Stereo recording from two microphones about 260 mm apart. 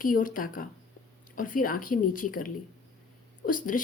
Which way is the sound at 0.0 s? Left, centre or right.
Left.